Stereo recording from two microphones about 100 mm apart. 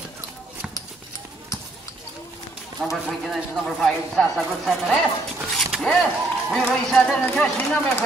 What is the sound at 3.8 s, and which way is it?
Speech, 5° left (ahead or behind).